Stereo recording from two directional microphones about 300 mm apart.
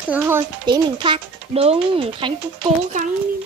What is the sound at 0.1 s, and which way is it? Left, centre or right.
Speech, centre.